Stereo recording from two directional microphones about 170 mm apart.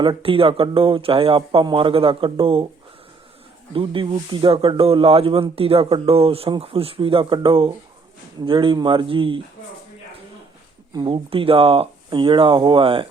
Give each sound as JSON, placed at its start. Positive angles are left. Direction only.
{"t": 0.0, "sound": "speech", "side_deg": -30}
{"t": 3.7, "sound": "speech", "side_deg": -30}
{"t": 10.9, "sound": "speech", "side_deg": -30}